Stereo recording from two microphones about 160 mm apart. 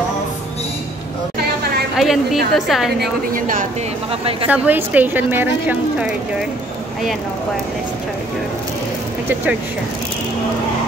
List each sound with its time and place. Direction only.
2.0 s a woman's voice: centre (ahead or behind)
3.0 s a woman's voice: 60° right (ahead or behind)
4.2 s speech: 35° right (ahead or behind)
4.5 s a woman's voice: 10° right (ahead or behind)